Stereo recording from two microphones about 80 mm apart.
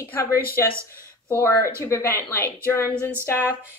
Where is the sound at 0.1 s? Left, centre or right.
Left.